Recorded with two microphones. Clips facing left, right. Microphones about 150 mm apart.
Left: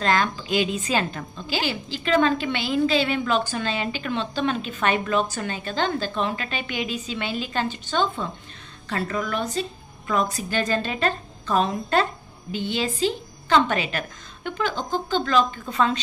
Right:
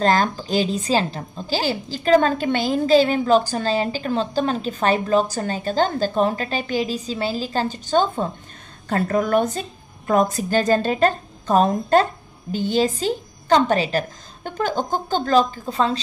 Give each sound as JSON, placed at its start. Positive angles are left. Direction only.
{"t": 0.0, "sound": "a woman's voice", "side_deg": -40}